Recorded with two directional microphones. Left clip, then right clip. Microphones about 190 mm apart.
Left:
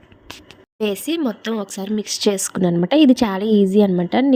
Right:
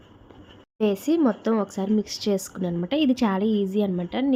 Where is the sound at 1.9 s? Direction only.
40° left (ahead or behind).